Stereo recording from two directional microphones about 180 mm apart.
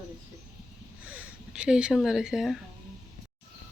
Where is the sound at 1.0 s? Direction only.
5° right (ahead or behind).